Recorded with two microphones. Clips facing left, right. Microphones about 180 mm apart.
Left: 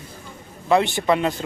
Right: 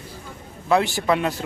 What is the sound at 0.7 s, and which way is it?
Speech, centre (ahead or behind).